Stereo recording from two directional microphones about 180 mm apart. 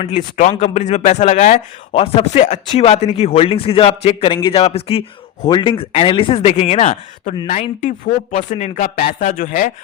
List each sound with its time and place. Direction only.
0.0 s speech: 40° left (ahead or behind)